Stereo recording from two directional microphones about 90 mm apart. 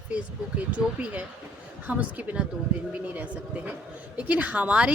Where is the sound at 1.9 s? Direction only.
15° right (ahead or behind).